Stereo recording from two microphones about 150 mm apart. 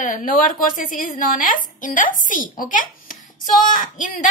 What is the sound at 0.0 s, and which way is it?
A woman's voice, 65° left (ahead or behind).